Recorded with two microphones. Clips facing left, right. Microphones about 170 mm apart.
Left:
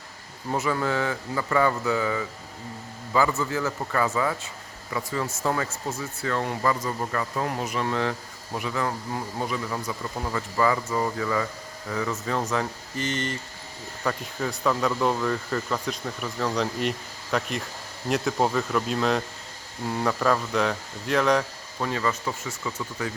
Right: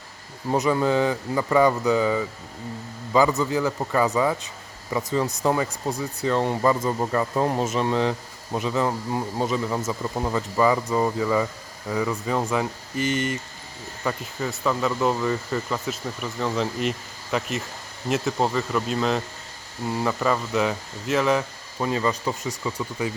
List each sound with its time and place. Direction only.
0.5 s speech: 20° right (ahead or behind)
21.8 s speech: 20° right (ahead or behind)